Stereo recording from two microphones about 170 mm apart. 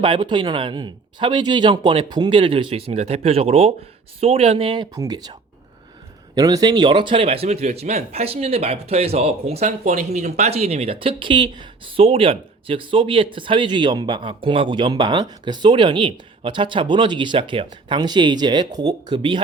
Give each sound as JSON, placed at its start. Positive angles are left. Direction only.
{"t": 0.0, "sound": "speech", "side_deg": -30}